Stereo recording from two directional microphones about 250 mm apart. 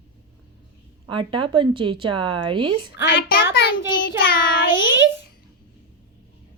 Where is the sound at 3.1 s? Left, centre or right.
Left.